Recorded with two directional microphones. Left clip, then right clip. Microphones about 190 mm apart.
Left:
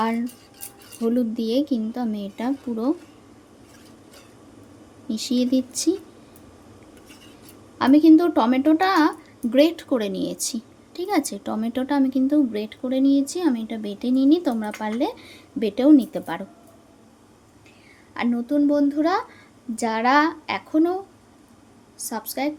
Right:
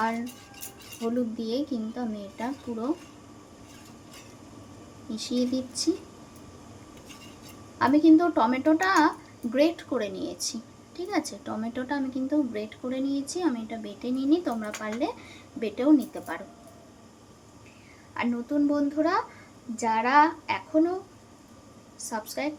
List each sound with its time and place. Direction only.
1.0 s speech: 55° left (ahead or behind)
5.1 s a woman's voice: 55° left (ahead or behind)
7.8 s speech: 55° left (ahead or behind)
18.1 s a woman's voice: 40° left (ahead or behind)
21.9 s a woman's voice: 40° left (ahead or behind)